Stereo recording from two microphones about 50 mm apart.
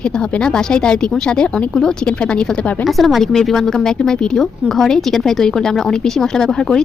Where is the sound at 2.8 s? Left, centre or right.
Centre.